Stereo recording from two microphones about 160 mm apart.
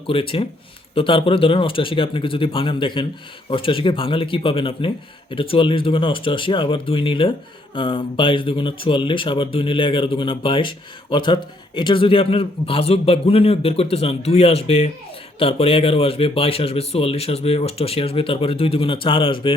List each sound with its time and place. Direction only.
0.1 s speech: 35° left (ahead or behind)